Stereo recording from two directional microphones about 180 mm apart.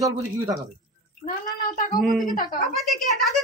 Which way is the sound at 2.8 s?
Centre (ahead or behind).